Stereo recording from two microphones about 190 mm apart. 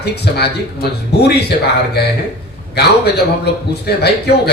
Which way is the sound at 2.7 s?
60° left (ahead or behind).